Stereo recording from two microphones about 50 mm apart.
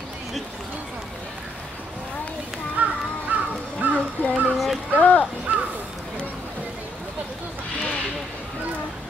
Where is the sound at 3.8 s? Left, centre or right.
Right.